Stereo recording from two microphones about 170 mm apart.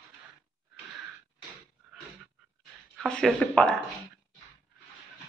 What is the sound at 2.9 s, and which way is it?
Speech, 5° left (ahead or behind).